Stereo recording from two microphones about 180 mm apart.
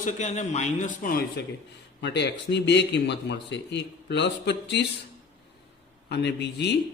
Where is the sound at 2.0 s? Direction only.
70° left (ahead or behind).